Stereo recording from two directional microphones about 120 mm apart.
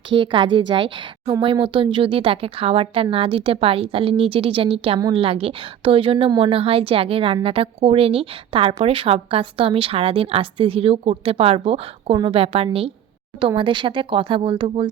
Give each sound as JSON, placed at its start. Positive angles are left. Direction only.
{"t": 0.1, "sound": "a woman's voice", "side_deg": -45}